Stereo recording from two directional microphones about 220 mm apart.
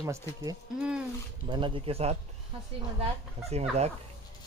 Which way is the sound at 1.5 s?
25° right (ahead or behind).